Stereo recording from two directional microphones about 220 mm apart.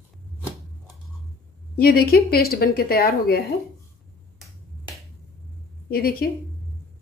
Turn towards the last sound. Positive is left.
turn(degrees=45)  # may be behind; listen again after turning